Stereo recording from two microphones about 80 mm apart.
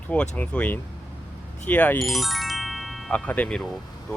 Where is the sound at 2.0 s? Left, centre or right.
Centre.